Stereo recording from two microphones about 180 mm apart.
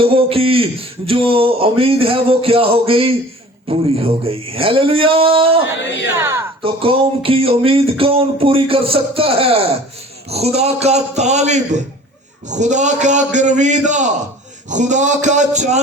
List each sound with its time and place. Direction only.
0.0 s a man's voice: 30° right (ahead or behind)
5.8 s speech: 75° left (ahead or behind)
6.1 s speech: 15° right (ahead or behind)
6.6 s a man's voice: 30° right (ahead or behind)